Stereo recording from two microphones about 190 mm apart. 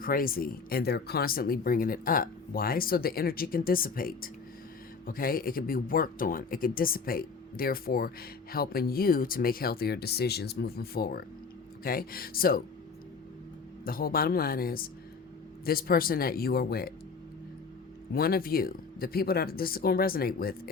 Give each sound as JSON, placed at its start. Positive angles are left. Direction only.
{"t": 0.0, "sound": "speech", "side_deg": 50}
{"t": 13.8, "sound": "speech", "side_deg": 50}
{"t": 18.1, "sound": "speech", "side_deg": 55}